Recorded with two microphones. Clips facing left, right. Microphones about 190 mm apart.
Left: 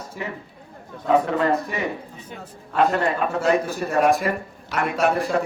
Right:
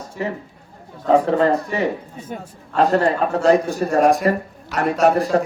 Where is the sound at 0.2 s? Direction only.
35° right (ahead or behind).